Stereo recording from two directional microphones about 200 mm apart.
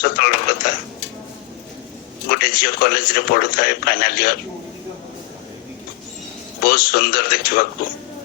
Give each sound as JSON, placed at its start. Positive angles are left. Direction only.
{"t": 0.0, "sound": "a sound", "side_deg": 50}
{"t": 2.3, "sound": "a man's voice", "side_deg": 50}
{"t": 6.6, "sound": "a man's voice", "side_deg": 50}